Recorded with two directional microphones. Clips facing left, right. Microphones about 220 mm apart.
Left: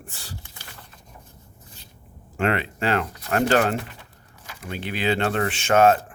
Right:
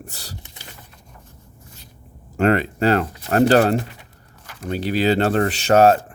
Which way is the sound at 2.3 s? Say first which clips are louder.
Right 6 dB; 40° right (ahead or behind).